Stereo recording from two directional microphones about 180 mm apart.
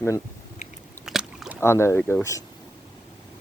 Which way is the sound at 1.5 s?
15° left (ahead or behind).